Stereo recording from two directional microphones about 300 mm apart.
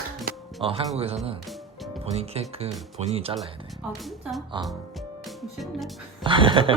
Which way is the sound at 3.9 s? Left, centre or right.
Centre.